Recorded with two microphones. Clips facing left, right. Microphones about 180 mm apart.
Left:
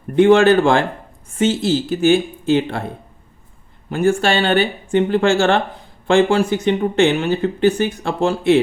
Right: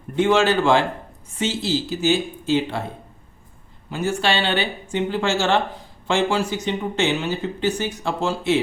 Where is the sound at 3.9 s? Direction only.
55° left (ahead or behind).